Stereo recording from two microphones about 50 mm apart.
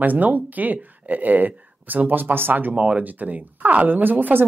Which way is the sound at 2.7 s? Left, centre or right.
Right.